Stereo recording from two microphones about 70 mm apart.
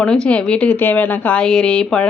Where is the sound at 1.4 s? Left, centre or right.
Centre.